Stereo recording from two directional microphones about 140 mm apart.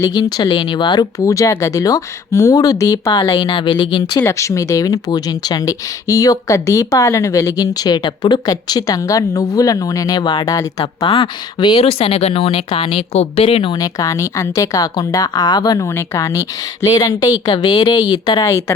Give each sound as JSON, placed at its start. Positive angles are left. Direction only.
{"t": 0.0, "sound": "speech", "side_deg": 25}
{"t": 4.2, "sound": "speech", "side_deg": 20}
{"t": 11.8, "sound": "speech", "side_deg": 45}
{"t": 13.7, "sound": "speech", "side_deg": 25}